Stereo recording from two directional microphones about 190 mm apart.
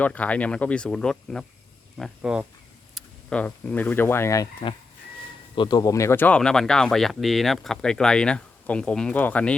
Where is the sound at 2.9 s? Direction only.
5° left (ahead or behind).